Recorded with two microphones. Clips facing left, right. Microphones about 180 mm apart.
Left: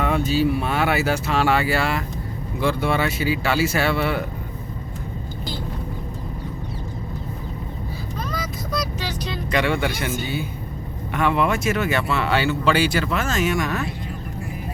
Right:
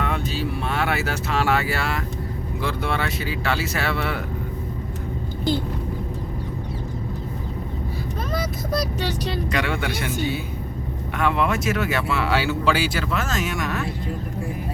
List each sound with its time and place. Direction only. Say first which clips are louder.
0.0 s speech: left 6 dB; 5° left (ahead or behind)
9.5 s speech: left 7 dB; centre (ahead or behind)